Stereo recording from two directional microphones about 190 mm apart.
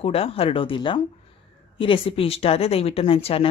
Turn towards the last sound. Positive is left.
turn(degrees=30)  # may be behind; listen again after turning